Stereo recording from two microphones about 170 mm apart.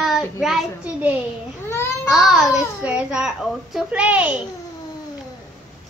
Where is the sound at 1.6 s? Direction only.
15° left (ahead or behind).